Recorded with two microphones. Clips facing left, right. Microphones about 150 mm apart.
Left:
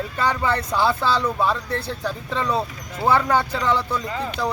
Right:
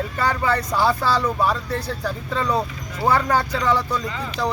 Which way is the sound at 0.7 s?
10° right (ahead or behind).